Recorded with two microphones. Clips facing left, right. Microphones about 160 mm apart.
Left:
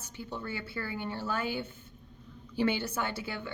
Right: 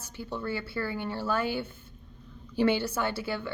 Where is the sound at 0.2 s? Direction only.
20° left (ahead or behind).